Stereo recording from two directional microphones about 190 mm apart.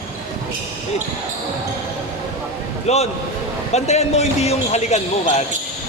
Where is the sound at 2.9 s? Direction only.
35° left (ahead or behind).